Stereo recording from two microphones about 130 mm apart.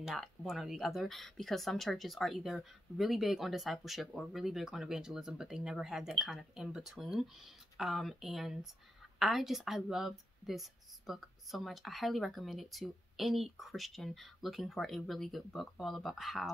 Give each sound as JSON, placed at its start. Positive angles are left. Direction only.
{"t": 0.0, "sound": "speech", "side_deg": 0}